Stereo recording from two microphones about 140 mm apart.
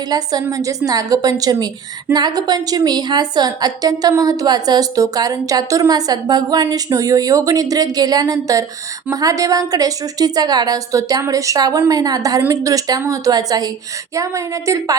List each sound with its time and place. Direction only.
0.1 s a woman's voice: 30° right (ahead or behind)